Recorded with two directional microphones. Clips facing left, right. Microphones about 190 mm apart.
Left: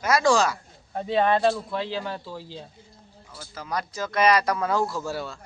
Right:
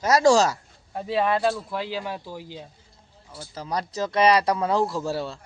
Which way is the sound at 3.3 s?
35° right (ahead or behind).